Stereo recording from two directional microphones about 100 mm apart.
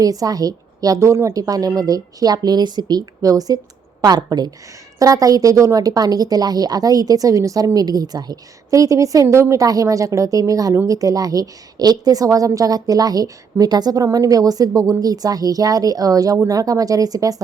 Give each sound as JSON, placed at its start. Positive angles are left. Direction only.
{"t": 0.0, "sound": "a woman's voice", "side_deg": -35}